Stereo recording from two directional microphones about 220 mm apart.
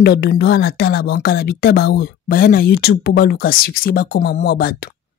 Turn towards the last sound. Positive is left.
turn(degrees=45)  # may be behind; listen again after turning